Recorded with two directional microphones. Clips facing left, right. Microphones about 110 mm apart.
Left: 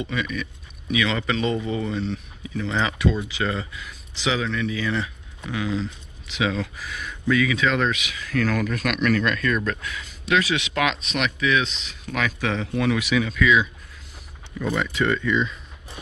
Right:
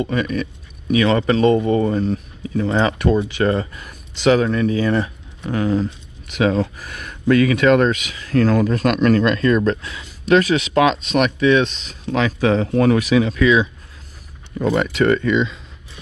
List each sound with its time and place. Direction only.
0.0 s speech: 45° right (ahead or behind)
10.2 s speech: 40° right (ahead or behind)
14.7 s speech: 65° right (ahead or behind); by 15.6 s 90° right